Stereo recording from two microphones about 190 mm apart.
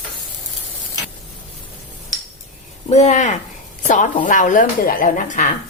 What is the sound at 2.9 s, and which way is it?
A woman's voice, 35° left (ahead or behind).